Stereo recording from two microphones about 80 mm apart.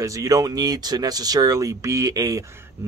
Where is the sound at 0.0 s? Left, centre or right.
Right.